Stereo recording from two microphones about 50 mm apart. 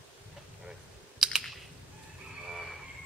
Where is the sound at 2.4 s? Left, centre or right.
Centre.